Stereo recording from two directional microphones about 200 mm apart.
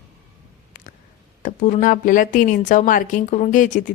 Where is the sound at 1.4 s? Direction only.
40° left (ahead or behind).